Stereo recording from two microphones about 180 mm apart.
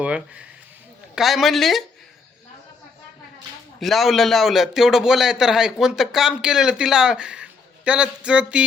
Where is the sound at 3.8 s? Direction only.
Centre (ahead or behind).